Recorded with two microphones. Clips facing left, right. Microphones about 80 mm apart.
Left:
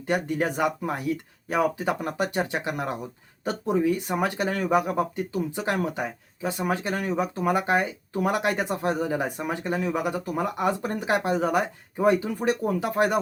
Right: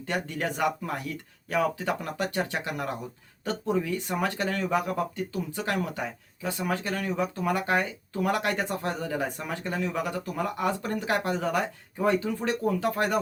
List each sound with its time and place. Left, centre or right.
0.1 s speech: centre